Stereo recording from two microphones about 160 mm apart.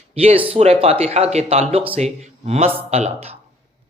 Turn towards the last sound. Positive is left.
turn(degrees=-40)  # may be behind; listen again after turning